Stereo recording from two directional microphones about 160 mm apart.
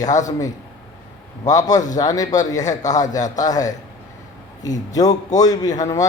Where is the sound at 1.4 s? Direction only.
20° left (ahead or behind).